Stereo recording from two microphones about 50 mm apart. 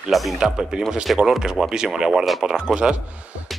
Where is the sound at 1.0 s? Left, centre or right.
Centre.